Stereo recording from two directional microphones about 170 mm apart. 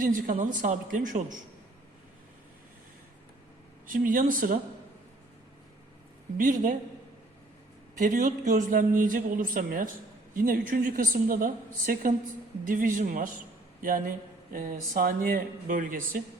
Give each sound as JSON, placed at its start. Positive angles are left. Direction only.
{"t": 0.0, "sound": "speech", "side_deg": -55}
{"t": 3.8, "sound": "speech", "side_deg": -55}
{"t": 6.3, "sound": "speech", "side_deg": -50}
{"t": 7.9, "sound": "a woman's voice", "side_deg": -50}